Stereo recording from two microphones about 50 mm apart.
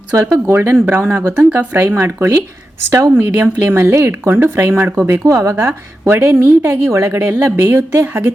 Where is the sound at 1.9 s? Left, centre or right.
Right.